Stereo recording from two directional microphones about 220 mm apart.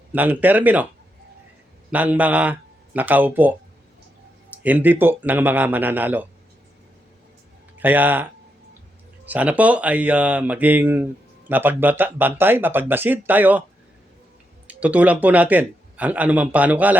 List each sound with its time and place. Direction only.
0.1 s speech: 10° right (ahead or behind)
1.9 s speech: 5° right (ahead or behind)
4.5 s speech: 5° right (ahead or behind)
7.8 s speech: 10° right (ahead or behind)
14.7 s speech: 5° right (ahead or behind)